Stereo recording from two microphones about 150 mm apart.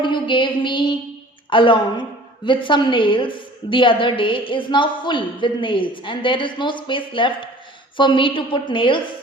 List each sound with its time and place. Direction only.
0.0 s a woman's voice: 35° left (ahead or behind)